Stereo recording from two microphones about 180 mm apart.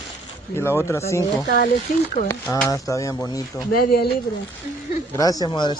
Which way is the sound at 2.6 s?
15° left (ahead or behind).